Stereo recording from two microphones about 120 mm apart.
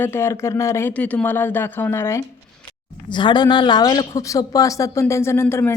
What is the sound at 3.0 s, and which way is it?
Speech, 40° left (ahead or behind).